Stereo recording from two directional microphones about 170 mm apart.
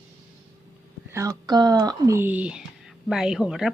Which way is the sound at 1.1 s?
20° right (ahead or behind).